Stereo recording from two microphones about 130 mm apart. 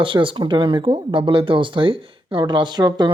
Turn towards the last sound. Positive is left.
turn(degrees=-35)  # may be behind; listen again after turning